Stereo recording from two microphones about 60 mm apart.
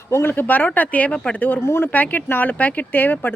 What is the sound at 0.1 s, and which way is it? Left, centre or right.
Speech, left.